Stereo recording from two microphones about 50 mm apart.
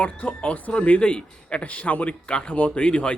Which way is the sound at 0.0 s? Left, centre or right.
Left.